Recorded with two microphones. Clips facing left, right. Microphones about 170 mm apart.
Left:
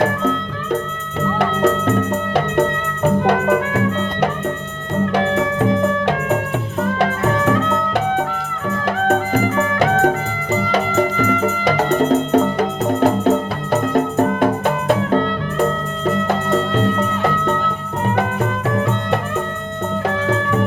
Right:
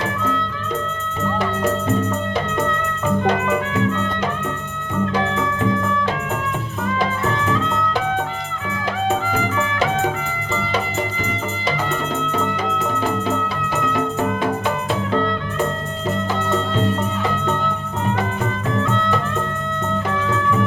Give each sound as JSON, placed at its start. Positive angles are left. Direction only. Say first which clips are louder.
{"t": 1.4, "sound": "music", "louder": "left 5 dB", "side_deg": 65}
{"t": 7.0, "sound": "music", "louder": "left 5 dB", "side_deg": 55}
{"t": 11.2, "sound": "music", "louder": "left 8 dB", "side_deg": 45}
{"t": 12.5, "sound": "music", "louder": "left 6 dB", "side_deg": 65}
{"t": 18.7, "sound": "music", "louder": "right 1 dB", "side_deg": 60}